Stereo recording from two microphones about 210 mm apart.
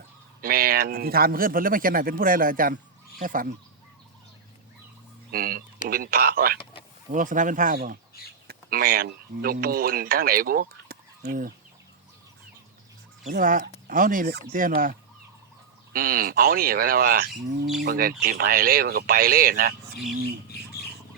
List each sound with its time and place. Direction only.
0.4 s a man's voice: 45° right (ahead or behind)
5.3 s a man's voice: 45° right (ahead or behind)
13.2 s a man's voice: 40° right (ahead or behind)